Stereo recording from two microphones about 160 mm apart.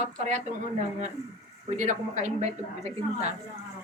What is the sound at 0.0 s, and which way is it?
Speech, 50° right (ahead or behind).